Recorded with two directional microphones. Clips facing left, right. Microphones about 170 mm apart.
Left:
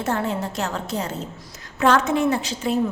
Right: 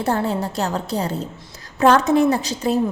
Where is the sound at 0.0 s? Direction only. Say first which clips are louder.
Right 3 dB; 35° right (ahead or behind).